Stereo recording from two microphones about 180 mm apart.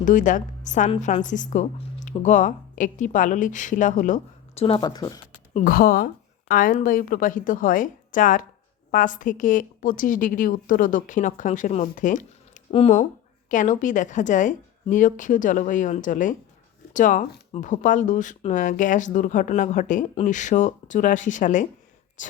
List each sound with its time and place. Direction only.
0.0 s speech: 45° left (ahead or behind)
4.6 s speech: 25° left (ahead or behind)
5.5 s speech: 50° left (ahead or behind)